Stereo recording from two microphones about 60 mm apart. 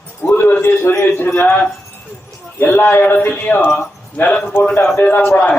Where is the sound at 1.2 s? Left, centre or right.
Left.